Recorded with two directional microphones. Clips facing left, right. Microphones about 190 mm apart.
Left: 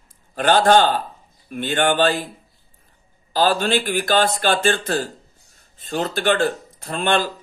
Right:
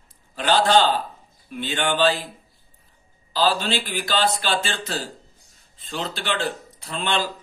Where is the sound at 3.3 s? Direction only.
50° left (ahead or behind).